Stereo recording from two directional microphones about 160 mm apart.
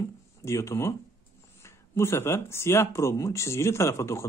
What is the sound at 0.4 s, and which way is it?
A man's voice, 20° left (ahead or behind).